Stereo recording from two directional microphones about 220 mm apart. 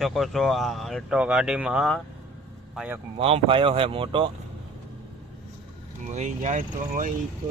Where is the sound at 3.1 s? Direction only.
25° right (ahead or behind).